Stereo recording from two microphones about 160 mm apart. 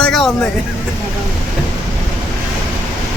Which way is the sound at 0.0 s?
Centre (ahead or behind).